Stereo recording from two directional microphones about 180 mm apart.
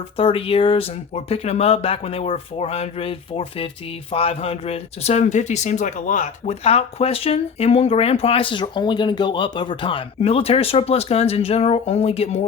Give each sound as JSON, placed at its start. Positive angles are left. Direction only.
{"t": 0.2, "sound": "speech", "side_deg": 30}